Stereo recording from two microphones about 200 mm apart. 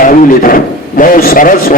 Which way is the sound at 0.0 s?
45° left (ahead or behind).